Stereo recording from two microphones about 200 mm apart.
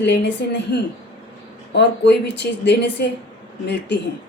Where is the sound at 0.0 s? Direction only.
60° left (ahead or behind).